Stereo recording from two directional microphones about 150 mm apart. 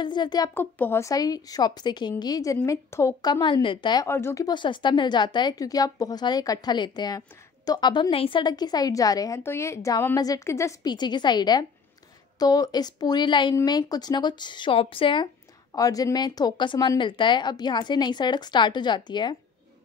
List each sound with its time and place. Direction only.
0.0 s speech: 30° left (ahead or behind)
0.6 s a woman's voice: 15° left (ahead or behind); by 4.1 s 30° left (ahead or behind)
4.1 s a woman's voice: 15° left (ahead or behind); by 15.2 s 35° left (ahead or behind)
15.7 s a woman's voice: 25° left (ahead or behind)